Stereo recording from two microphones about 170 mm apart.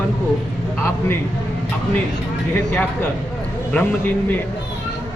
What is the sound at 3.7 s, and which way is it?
Speech, 10° left (ahead or behind).